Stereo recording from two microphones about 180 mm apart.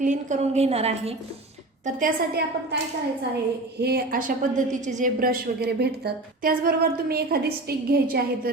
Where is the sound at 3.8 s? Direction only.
55° right (ahead or behind).